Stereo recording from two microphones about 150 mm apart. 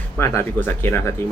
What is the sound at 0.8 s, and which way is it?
Speech, 15° left (ahead or behind).